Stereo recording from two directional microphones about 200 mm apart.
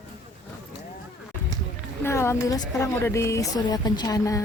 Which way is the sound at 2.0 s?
15° left (ahead or behind).